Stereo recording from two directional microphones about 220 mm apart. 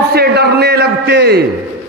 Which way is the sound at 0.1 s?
45° right (ahead or behind).